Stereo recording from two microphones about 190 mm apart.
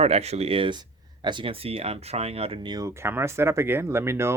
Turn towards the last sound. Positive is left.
turn(degrees=-15)  # may be behind; listen again after turning